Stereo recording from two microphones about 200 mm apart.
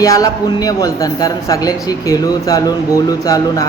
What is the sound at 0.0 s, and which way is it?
A man's voice, 15° left (ahead or behind).